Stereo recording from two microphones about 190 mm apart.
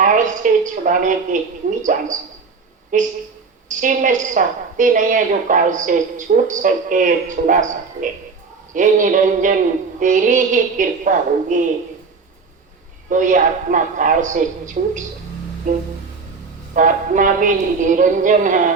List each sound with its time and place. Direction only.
0.0 s a woman's voice: 40° right (ahead or behind)
8.7 s a woman's voice: 40° right (ahead or behind)
13.1 s a woman's voice: 45° right (ahead or behind)